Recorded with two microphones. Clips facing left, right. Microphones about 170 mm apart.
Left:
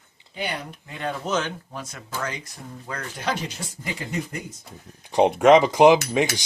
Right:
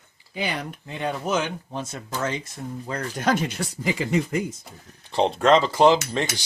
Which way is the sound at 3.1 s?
50° right (ahead or behind).